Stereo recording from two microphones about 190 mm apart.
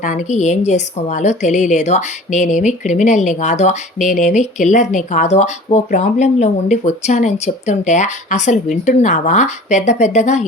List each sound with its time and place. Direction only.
0.0 s a woman's voice: 40° left (ahead or behind)